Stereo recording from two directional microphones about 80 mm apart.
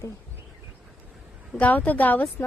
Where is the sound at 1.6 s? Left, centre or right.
Centre.